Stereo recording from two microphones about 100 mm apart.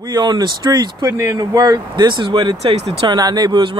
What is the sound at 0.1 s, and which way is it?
Speech, 45° right (ahead or behind).